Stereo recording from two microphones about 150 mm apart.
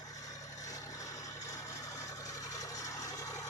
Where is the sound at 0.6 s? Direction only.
20° left (ahead or behind).